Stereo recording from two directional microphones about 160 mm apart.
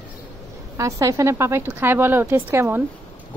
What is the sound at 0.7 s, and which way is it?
Speech, 20° right (ahead or behind).